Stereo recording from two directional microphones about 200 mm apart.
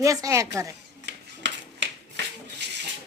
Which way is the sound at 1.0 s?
60° right (ahead or behind).